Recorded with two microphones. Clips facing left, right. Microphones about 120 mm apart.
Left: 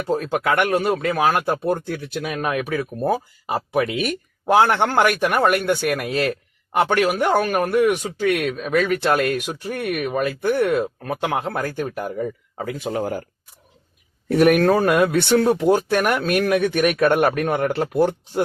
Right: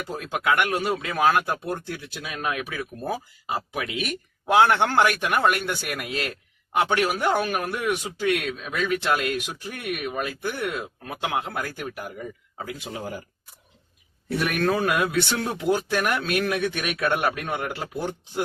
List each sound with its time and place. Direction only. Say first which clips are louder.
0.1 s speech: left 4 dB; 40° left (ahead or behind)
14.3 s speech: left 9 dB; 50° left (ahead or behind)
15.3 s speech: left 8 dB; 45° left (ahead or behind)
17.7 s speech: left 11 dB; 60° left (ahead or behind)